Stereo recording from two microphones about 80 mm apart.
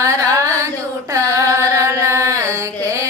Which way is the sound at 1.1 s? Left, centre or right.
Right.